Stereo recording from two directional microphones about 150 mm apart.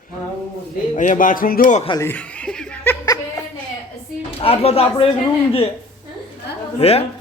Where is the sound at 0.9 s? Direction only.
60° left (ahead or behind).